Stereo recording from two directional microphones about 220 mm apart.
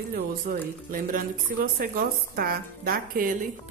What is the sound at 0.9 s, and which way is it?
Speech, 40° right (ahead or behind).